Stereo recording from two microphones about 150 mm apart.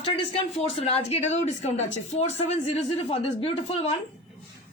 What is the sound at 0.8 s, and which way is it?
A woman's voice, 40° left (ahead or behind).